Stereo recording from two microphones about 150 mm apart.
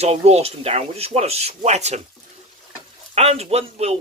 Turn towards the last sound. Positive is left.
turn(degrees=-45)  # may be behind; listen again after turning